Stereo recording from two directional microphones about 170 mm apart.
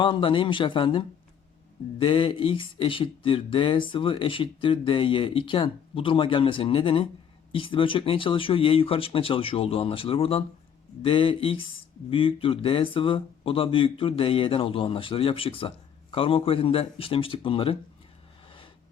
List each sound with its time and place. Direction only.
0.0 s speech: 30° left (ahead or behind)